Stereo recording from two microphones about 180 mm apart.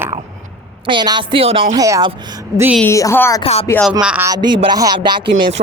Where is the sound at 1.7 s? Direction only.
20° right (ahead or behind).